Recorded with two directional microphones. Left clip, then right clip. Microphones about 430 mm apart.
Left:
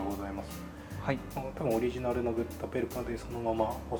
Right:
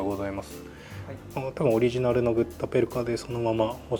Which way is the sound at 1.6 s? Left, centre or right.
Right.